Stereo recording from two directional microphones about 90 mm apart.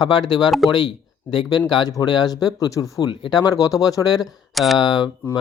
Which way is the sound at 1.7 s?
55° left (ahead or behind).